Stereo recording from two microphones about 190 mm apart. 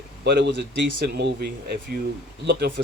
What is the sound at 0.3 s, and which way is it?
Speech, 65° right (ahead or behind).